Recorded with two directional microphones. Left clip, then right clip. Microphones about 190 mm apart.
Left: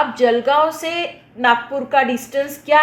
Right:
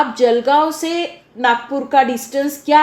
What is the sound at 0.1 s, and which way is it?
A woman's voice, 40° right (ahead or behind).